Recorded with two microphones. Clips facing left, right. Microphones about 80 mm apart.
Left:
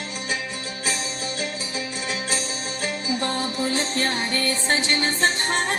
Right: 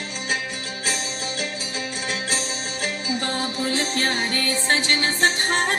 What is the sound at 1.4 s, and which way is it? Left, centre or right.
Music, right.